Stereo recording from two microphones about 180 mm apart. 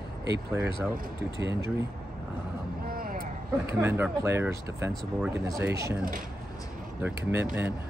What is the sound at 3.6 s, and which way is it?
Speech, 15° right (ahead or behind).